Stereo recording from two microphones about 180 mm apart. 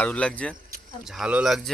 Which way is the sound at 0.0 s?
5° left (ahead or behind).